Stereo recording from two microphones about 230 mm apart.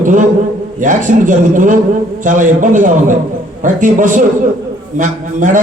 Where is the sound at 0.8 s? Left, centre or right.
Right.